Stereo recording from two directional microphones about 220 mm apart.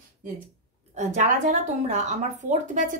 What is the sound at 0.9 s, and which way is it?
Speech, 35° right (ahead or behind).